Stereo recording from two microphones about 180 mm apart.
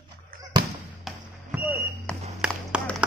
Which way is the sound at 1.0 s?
10° right (ahead or behind).